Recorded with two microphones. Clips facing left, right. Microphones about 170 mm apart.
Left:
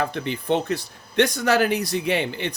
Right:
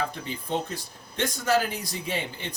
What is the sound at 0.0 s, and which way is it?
Speech, 75° left (ahead or behind).